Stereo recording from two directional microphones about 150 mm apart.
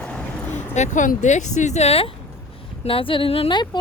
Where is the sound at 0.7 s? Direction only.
55° left (ahead or behind).